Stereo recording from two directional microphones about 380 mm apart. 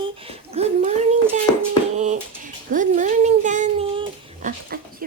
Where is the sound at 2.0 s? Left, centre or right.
Centre.